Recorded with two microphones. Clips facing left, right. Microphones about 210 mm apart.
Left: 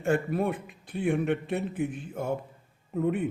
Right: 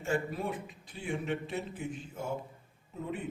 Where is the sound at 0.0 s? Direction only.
55° left (ahead or behind).